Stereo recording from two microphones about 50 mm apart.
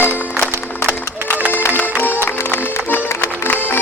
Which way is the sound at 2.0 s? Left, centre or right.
Left.